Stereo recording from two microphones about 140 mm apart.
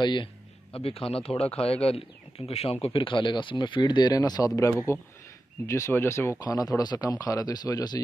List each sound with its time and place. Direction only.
0.0 s a man's voice: 35° left (ahead or behind)